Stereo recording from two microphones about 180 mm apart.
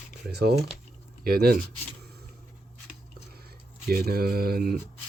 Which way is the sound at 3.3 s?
60° right (ahead or behind).